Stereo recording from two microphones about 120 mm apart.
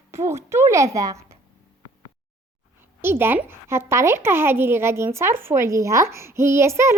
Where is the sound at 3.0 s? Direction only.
20° right (ahead or behind).